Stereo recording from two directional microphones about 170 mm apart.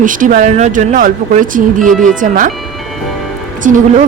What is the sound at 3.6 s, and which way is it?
Speech, 50° right (ahead or behind).